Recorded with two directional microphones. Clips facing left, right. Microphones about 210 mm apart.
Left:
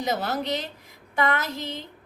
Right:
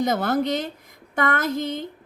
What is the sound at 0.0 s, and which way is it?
A woman's voice, 50° right (ahead or behind).